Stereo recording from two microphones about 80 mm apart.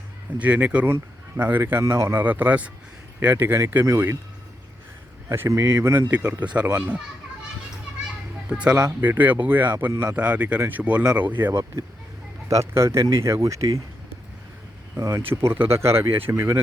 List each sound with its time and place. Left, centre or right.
0.3 s speech: centre
1.8 s speech: right
2.1 s speech: right
3.3 s speech: right
5.3 s speech: right
6.1 s speech: right
8.4 s speech: centre
12.5 s speech: right
14.9 s speech: right
15.3 s speech: right